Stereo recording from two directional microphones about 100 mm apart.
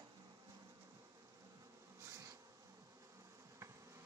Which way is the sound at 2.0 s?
30° right (ahead or behind).